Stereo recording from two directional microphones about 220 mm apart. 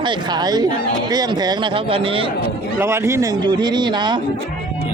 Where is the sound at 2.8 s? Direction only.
10° right (ahead or behind).